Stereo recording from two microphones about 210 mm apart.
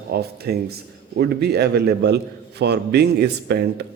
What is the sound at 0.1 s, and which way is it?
A man's voice, 50° right (ahead or behind).